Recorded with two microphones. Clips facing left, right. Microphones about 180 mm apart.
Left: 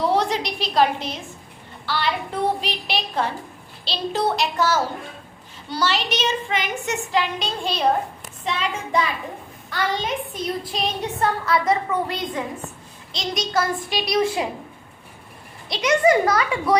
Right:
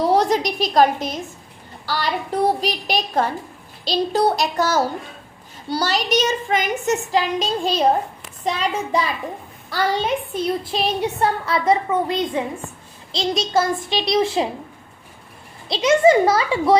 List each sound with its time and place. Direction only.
0.0 s a woman's voice: 40° right (ahead or behind)
9.6 s a woman's voice: 35° right (ahead or behind)
15.7 s a woman's voice: 25° right (ahead or behind)